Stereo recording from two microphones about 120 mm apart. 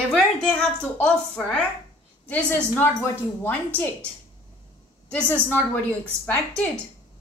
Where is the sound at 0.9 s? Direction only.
10° left (ahead or behind).